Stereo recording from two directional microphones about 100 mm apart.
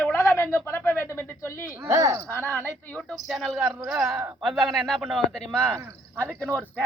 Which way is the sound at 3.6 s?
20° right (ahead or behind).